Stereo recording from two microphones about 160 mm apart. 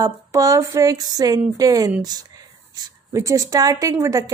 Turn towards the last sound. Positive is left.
turn(degrees=-20)  # may be behind; listen again after turning